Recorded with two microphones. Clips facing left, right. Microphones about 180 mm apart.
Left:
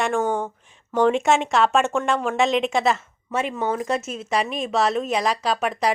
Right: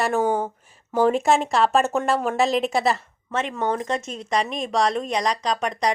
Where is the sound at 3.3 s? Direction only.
10° left (ahead or behind).